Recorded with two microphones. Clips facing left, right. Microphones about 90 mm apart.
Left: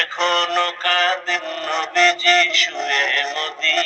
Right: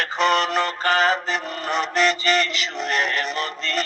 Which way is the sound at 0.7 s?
25° right (ahead or behind).